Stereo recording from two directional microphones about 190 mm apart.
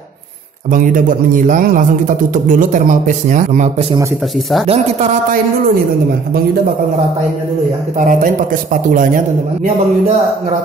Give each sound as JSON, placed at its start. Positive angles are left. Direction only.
{"t": 0.7, "sound": "speech", "side_deg": -45}
{"t": 8.0, "sound": "speech", "side_deg": -45}